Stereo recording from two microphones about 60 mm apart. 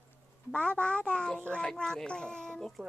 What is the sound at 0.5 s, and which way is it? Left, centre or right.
Speech, left.